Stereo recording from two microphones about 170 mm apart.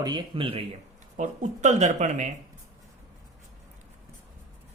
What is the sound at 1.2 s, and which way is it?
Speech, 45° right (ahead or behind).